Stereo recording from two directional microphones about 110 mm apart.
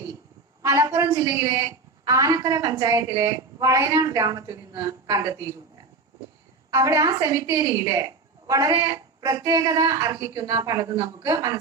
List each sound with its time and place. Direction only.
0.6 s a woman's voice: 30° right (ahead or behind)
6.7 s a woman's voice: 30° right (ahead or behind)